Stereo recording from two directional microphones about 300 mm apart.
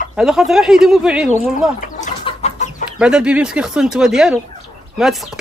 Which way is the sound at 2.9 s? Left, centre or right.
Centre.